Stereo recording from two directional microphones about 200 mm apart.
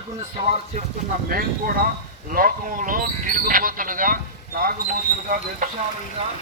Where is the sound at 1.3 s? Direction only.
45° right (ahead or behind).